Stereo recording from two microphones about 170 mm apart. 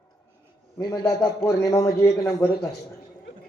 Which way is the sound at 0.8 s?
20° left (ahead or behind).